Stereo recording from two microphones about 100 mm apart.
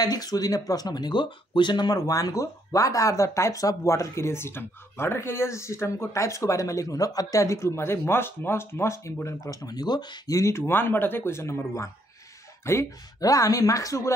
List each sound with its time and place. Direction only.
0.0 s speech: 40° left (ahead or behind)
10.3 s speech: 30° left (ahead or behind)